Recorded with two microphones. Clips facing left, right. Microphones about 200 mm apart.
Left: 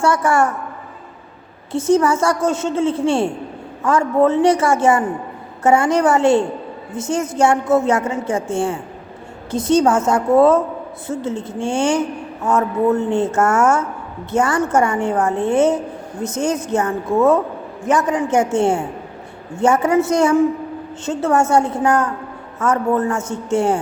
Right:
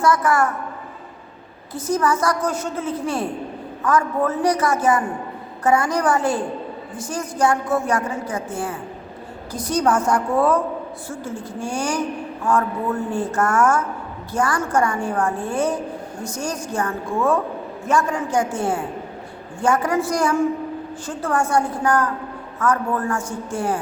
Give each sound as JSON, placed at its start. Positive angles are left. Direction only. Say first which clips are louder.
{"t": 0.0, "sound": "a woman's voice", "louder": "left 2 dB", "side_deg": 30}
{"t": 1.7, "sound": "a woman's voice", "louder": "left 6 dB", "side_deg": 25}